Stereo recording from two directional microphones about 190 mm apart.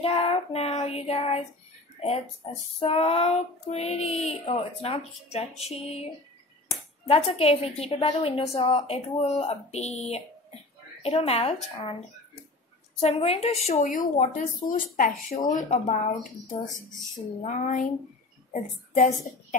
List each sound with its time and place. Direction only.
0.0 s a woman's voice: 30° left (ahead or behind)
7.1 s a woman's voice: 30° left (ahead or behind)
13.0 s a woman's voice: 35° left (ahead or behind)
17.4 s a woman's voice: 40° left (ahead or behind)